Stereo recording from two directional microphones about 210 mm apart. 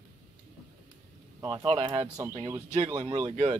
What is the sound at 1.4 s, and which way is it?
Speech, 25° right (ahead or behind).